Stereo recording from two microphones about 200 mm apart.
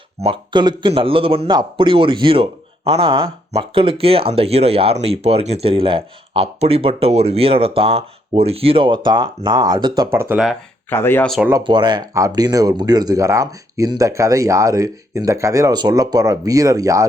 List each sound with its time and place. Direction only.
0.2 s a man's voice: 25° right (ahead or behind); by 10.6 s 5° right (ahead or behind)
10.8 s speech: 10° left (ahead or behind)
11.3 s speech: 5° right (ahead or behind)
11.5 s speech: 25° right (ahead or behind)